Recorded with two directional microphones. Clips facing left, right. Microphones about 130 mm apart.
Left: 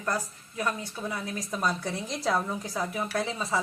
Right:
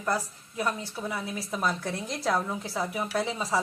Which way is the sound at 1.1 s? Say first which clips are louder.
Right 1 dB; 5° right (ahead or behind).